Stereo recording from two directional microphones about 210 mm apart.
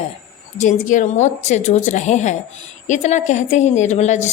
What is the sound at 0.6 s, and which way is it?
A woman's voice, 35° left (ahead or behind).